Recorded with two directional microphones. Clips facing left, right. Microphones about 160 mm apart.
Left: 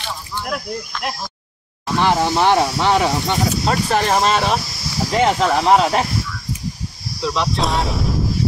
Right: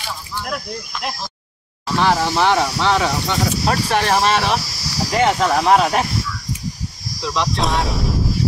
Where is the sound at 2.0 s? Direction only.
20° left (ahead or behind).